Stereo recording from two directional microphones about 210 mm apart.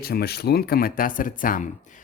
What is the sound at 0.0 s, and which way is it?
Speech, 45° left (ahead or behind).